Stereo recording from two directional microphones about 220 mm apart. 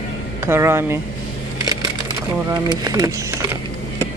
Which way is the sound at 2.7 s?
15° right (ahead or behind).